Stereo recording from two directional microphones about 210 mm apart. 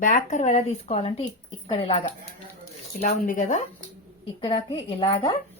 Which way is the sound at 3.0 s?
35° left (ahead or behind).